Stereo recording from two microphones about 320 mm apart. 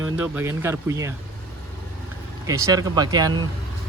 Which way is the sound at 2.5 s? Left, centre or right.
Centre.